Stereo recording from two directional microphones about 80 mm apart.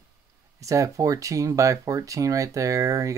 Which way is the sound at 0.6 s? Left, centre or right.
Right.